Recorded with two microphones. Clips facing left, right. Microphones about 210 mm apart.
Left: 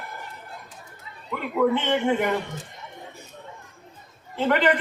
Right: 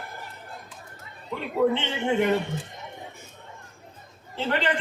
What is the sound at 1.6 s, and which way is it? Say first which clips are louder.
Speech: left 1 dB; 25° right (ahead or behind).